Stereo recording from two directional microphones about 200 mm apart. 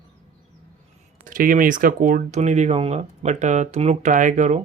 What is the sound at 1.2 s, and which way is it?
Speech, 45° right (ahead or behind).